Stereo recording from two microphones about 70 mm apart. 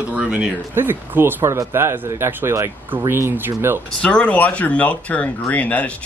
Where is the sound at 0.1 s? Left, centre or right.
Centre.